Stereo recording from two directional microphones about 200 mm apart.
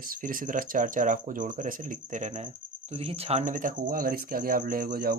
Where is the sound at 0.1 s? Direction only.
45° right (ahead or behind).